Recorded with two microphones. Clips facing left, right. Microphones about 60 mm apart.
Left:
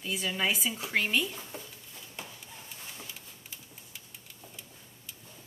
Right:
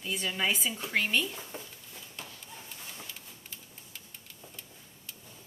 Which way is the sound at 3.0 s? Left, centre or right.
Centre.